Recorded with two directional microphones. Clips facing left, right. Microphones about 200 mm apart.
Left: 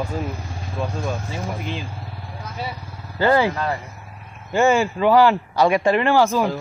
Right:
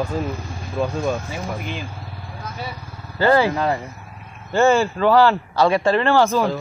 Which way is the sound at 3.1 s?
15° left (ahead or behind).